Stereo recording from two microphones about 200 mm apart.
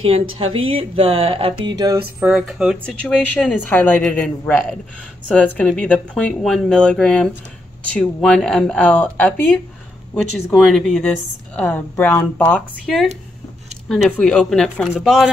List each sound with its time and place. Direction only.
0.7 s speech: 30° right (ahead or behind)
2.1 s speech: 5° right (ahead or behind)